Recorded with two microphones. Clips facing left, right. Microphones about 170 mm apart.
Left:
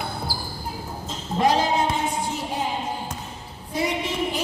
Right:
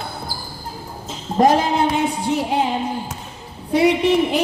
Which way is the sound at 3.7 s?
65° right (ahead or behind).